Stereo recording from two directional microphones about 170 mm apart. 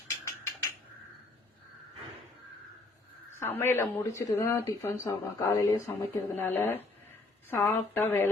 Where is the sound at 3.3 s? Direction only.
15° left (ahead or behind).